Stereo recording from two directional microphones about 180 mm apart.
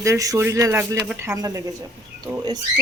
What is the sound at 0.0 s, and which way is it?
Speech, 15° right (ahead or behind).